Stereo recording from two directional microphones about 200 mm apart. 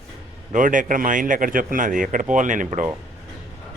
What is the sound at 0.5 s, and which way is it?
Speech, 40° right (ahead or behind).